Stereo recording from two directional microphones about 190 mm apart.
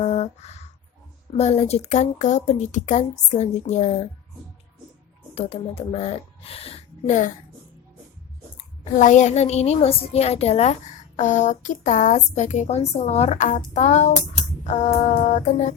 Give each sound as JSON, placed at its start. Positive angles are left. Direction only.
{"t": 0.0, "sound": "a woman's voice", "side_deg": 35}
{"t": 5.3, "sound": "speech", "side_deg": 30}
{"t": 8.8, "sound": "a woman's voice", "side_deg": 40}